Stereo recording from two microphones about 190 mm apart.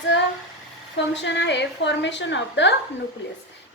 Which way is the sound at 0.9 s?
70° left (ahead or behind).